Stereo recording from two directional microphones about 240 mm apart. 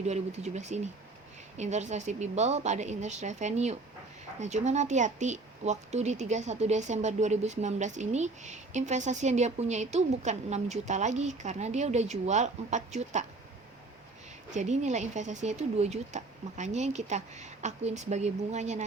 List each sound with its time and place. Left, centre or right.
0.0 s speech: right
14.5 s speech: right